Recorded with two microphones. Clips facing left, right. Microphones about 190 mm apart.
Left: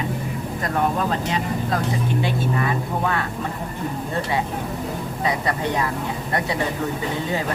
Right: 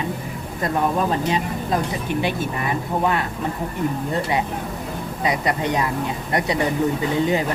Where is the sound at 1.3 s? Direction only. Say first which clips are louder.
Right 1 dB; 20° right (ahead or behind).